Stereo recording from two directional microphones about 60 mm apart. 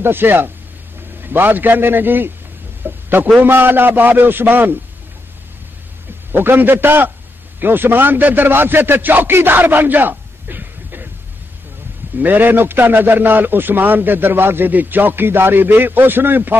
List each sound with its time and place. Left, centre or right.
0.0 s a man's voice: right
2.8 s a sound: right
3.3 s a man's voice: right
6.3 s a man's voice: right
12.2 s a man's voice: right